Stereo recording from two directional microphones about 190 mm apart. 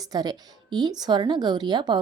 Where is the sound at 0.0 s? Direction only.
20° right (ahead or behind).